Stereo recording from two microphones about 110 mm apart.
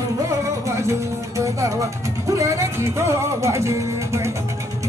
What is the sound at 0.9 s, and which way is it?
Speech, 30° right (ahead or behind).